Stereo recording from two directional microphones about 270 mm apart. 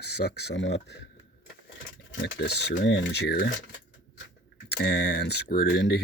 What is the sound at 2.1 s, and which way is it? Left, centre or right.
Speech, left.